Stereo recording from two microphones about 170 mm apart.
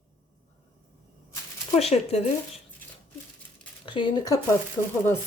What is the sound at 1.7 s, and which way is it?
Speech, 40° left (ahead or behind).